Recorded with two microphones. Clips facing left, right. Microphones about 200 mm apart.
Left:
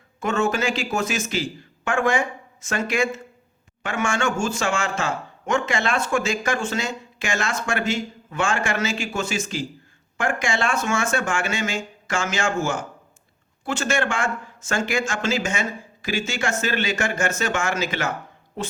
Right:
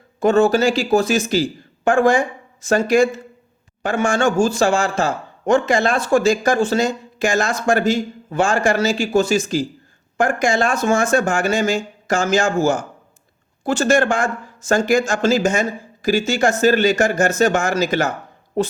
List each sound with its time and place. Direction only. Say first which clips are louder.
0.2 s speech: right 8 dB; 35° right (ahead or behind)